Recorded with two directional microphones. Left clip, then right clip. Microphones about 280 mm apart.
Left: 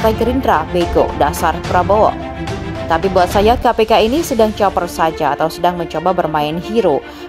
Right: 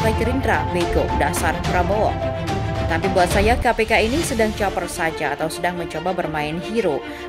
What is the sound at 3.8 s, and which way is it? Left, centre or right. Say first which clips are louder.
A woman's voice: left 6 dB; centre.